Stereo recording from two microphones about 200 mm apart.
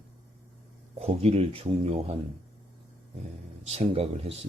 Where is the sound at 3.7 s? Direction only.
30° right (ahead or behind).